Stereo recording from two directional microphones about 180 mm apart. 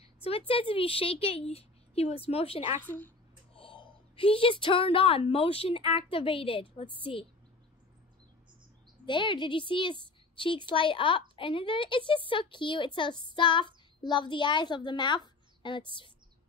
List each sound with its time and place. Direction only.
0.2 s a woman's voice: 30° left (ahead or behind)
9.0 s a woman's voice: 25° left (ahead or behind)